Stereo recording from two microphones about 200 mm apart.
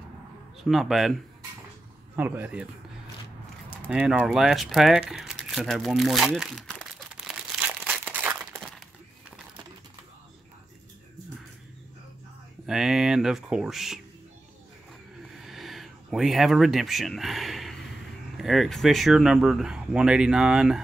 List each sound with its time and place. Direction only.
0.7 s speech: centre (ahead or behind)
2.1 s speech: 10° right (ahead or behind)
3.8 s crumpling: 5° right (ahead or behind)
12.6 s speech: 5° right (ahead or behind)
15.3 s a sound: centre (ahead or behind)
18.4 s speech: centre (ahead or behind)